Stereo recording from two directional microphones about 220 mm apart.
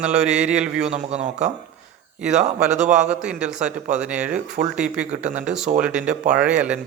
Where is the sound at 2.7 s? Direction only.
35° right (ahead or behind).